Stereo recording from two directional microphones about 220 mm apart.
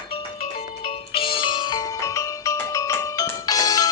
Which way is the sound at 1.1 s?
25° left (ahead or behind).